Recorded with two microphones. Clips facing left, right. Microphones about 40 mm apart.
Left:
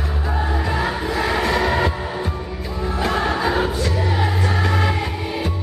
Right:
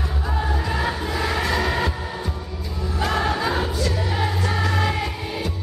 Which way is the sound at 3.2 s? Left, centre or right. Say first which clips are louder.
Left 3 dB; centre.